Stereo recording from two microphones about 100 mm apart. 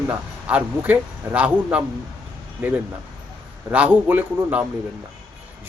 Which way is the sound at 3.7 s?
15° right (ahead or behind).